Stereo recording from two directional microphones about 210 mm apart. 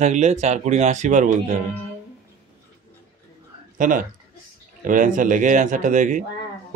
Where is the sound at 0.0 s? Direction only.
35° right (ahead or behind).